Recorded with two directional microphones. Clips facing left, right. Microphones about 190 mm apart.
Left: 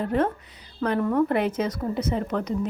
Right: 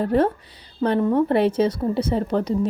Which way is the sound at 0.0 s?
35° right (ahead or behind).